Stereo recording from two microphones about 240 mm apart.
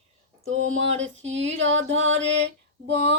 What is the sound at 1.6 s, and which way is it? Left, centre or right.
Music, right.